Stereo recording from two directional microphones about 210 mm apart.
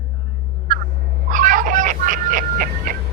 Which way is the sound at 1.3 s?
40° right (ahead or behind).